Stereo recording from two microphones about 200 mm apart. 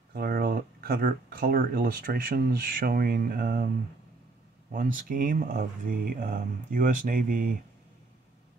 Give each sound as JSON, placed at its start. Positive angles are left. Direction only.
{"t": 0.1, "sound": "speech", "side_deg": -50}
{"t": 4.7, "sound": "speech", "side_deg": -45}